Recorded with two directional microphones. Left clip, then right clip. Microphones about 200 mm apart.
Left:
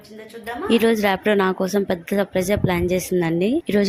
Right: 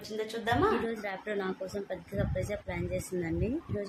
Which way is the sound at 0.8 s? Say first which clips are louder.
Left 17 dB; 55° left (ahead or behind).